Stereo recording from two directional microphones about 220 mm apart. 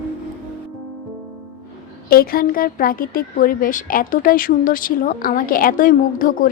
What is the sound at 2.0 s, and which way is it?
A woman's voice, 45° left (ahead or behind).